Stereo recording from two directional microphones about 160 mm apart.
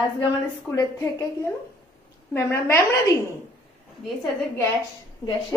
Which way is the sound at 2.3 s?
15° left (ahead or behind).